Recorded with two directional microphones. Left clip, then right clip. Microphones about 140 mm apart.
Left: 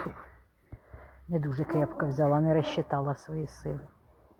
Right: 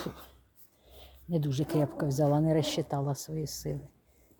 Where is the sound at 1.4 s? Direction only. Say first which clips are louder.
Left 1 dB; 40° right (ahead or behind).